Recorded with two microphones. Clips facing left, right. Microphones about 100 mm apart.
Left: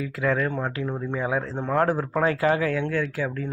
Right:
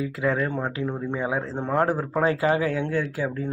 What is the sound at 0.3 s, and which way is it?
Speech, 20° right (ahead or behind).